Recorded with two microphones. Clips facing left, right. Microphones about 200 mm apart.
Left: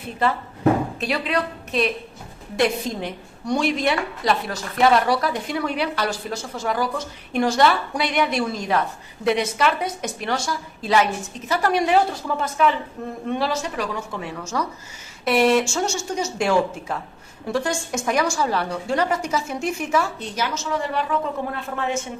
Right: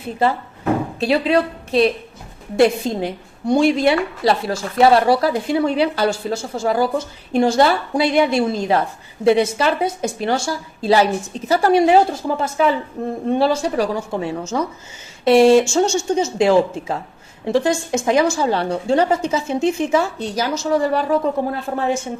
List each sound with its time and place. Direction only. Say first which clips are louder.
0.9 s a woman's voice: right 7 dB; 30° right (ahead or behind)